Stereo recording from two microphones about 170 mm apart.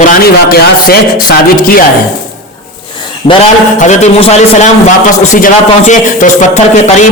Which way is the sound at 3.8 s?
40° left (ahead or behind).